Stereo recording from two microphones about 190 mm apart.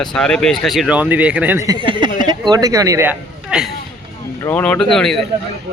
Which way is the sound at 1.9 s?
25° right (ahead or behind).